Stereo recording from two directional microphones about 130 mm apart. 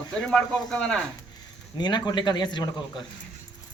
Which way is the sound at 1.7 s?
35° left (ahead or behind).